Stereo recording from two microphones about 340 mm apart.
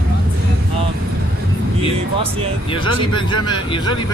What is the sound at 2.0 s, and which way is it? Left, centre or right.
Speech, centre.